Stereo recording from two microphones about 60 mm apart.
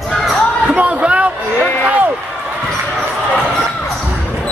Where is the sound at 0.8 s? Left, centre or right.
Centre.